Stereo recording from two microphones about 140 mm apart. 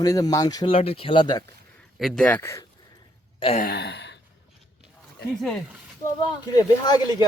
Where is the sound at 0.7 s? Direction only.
45° left (ahead or behind).